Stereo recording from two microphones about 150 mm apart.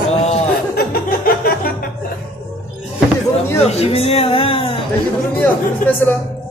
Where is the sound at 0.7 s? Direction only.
85° left.